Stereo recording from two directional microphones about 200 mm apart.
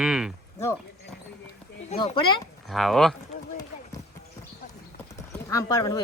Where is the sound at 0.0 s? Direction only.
5° right (ahead or behind).